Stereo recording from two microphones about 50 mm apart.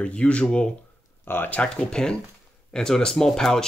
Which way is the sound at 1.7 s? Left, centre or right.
Centre.